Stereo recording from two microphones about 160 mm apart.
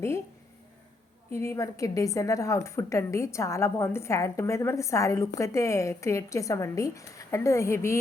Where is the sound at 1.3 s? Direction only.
15° left (ahead or behind).